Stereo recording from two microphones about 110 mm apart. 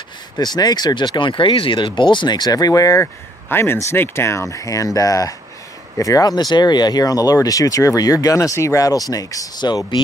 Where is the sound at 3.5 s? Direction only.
20° left (ahead or behind).